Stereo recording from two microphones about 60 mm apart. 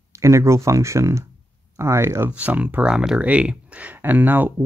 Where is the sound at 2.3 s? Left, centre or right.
Right.